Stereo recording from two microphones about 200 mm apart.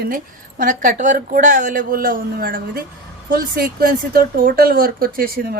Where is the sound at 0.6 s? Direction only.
40° right (ahead or behind).